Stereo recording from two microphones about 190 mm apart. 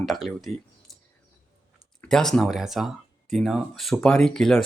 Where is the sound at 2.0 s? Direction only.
5° left (ahead or behind).